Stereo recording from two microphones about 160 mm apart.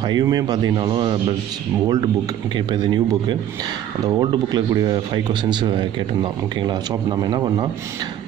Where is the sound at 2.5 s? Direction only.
30° right (ahead or behind).